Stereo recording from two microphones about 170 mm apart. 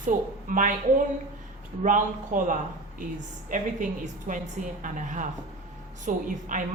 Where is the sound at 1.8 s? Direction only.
50° right (ahead or behind).